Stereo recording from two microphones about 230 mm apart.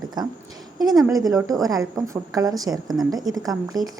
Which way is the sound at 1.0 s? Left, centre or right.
Centre.